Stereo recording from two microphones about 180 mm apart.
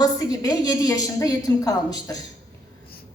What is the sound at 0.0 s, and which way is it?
A woman's voice, 20° left (ahead or behind).